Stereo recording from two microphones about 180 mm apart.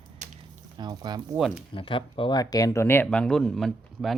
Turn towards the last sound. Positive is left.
turn(degrees=0)  # may be behind; listen again after turning